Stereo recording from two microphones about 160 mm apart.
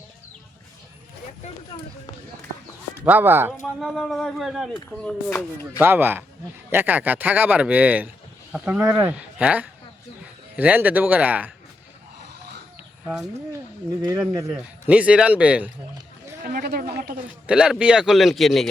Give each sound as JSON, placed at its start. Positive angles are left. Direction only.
{"t": 3.0, "sound": "speech", "side_deg": -10}
{"t": 3.8, "sound": "speech", "side_deg": 0}
{"t": 5.8, "sound": "speech", "side_deg": -15}
{"t": 14.0, "sound": "speech", "side_deg": -20}
{"t": 14.5, "sound": "speech", "side_deg": -5}
{"t": 16.4, "sound": "speech", "side_deg": -70}
{"t": 17.4, "sound": "speech", "side_deg": -5}